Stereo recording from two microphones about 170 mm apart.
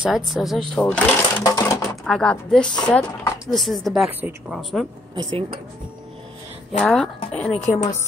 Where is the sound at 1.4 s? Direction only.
20° left (ahead or behind).